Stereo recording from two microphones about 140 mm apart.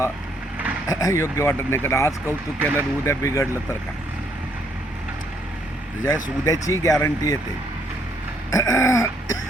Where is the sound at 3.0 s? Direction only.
20° left (ahead or behind).